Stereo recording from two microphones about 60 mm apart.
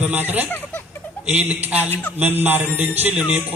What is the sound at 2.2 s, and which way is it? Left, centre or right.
Mantra, right.